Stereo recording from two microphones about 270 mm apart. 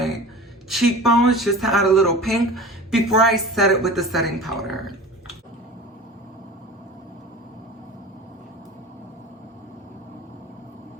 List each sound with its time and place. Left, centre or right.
0.7 s speech: centre